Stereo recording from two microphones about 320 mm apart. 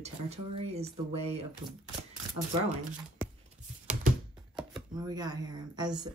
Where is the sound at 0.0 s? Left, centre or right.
Centre.